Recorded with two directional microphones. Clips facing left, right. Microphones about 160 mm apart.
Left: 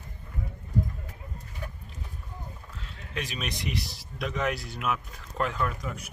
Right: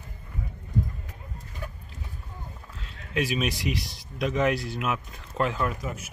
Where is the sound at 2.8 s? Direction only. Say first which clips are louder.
Right 8 dB; 5° right (ahead or behind).